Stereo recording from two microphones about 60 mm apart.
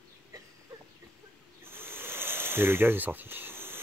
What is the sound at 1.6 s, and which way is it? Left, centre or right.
Snake, right.